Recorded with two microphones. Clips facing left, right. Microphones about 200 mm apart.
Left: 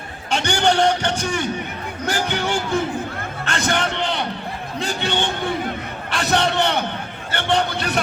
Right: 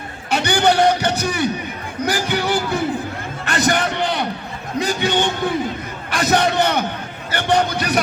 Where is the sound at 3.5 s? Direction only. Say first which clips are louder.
Right 4 dB; 40° right (ahead or behind).